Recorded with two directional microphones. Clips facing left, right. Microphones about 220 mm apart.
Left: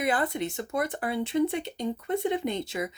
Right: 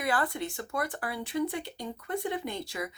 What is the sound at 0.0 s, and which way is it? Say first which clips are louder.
Speech: left 3 dB; 20° left (ahead or behind).